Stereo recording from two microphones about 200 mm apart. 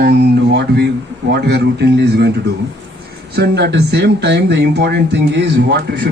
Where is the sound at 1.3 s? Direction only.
55° right (ahead or behind).